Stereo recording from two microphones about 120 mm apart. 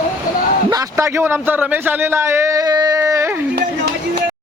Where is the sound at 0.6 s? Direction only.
25° right (ahead or behind).